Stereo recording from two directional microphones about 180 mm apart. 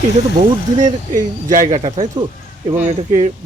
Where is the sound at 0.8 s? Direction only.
45° right (ahead or behind).